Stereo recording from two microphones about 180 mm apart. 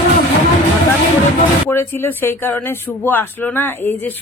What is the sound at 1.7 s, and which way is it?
A woman's voice, 10° left (ahead or behind).